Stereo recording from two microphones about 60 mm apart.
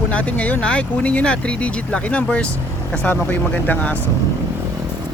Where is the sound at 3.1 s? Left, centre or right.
Left.